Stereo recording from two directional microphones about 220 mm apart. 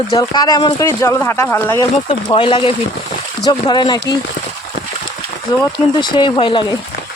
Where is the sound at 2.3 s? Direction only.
20° left (ahead or behind).